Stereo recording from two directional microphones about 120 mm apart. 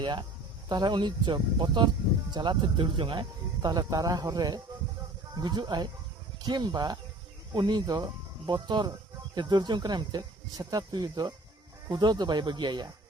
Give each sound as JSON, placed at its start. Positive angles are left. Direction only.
{"t": 0.0, "sound": "speech", "side_deg": -40}